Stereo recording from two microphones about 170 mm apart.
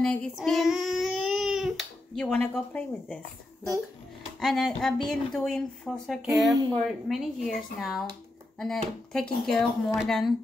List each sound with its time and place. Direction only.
0.0 s speech: 5° left (ahead or behind)
4.4 s a woman's voice: centre (ahead or behind)